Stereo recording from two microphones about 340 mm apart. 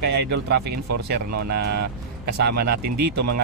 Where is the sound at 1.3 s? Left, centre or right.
Right.